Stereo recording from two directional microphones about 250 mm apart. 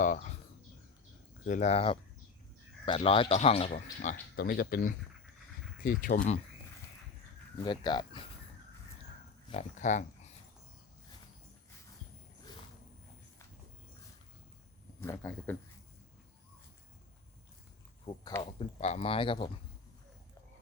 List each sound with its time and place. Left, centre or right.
0.0 s speech: left
1.5 s a man's voice: left
7.6 s speech: centre
9.5 s a man's voice: left
15.0 s speech: centre
18.0 s a man's voice: centre